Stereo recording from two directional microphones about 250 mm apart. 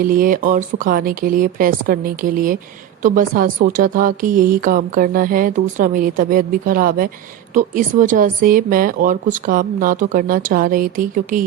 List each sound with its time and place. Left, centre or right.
0.0 s speech: right